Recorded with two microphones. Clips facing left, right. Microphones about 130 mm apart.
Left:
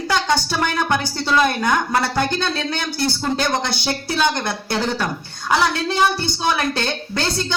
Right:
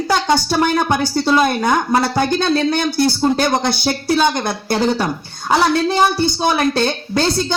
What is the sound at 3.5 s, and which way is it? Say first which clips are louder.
Speech: right 5 dB; 40° right (ahead or behind).